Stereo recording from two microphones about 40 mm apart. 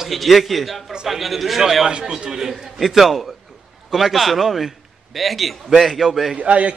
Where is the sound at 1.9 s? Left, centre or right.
Right; by 6.3 s centre.